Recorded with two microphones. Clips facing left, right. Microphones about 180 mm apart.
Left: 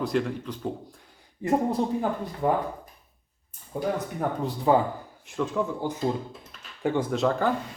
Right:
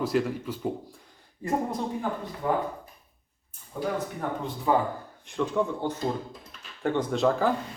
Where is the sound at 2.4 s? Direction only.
45° left (ahead or behind).